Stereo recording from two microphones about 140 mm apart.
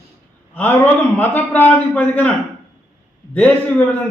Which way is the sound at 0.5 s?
10° left (ahead or behind).